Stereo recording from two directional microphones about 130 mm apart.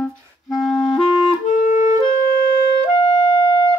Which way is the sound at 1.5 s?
75° left (ahead or behind).